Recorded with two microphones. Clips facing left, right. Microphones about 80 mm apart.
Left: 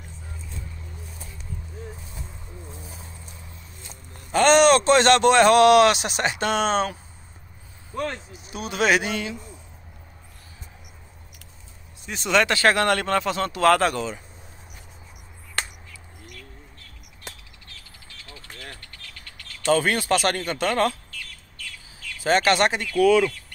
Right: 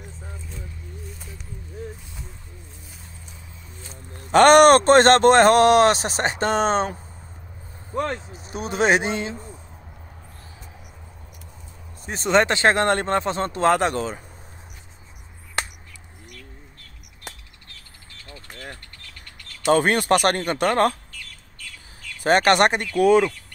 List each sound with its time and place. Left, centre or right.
2.6 s a sound: left
4.3 s speech: right
12.1 s speech: right
19.7 s speech: right
22.2 s speech: right